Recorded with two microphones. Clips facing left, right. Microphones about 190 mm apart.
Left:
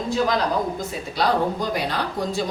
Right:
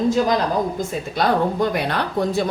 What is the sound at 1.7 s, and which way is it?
Speech, 60° right (ahead or behind).